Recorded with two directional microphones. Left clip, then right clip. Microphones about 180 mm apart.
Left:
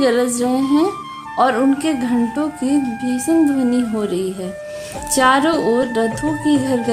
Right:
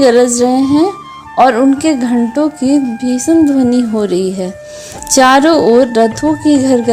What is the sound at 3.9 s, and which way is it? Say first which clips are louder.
A woman's voice: right 7 dB; 30° right (ahead or behind).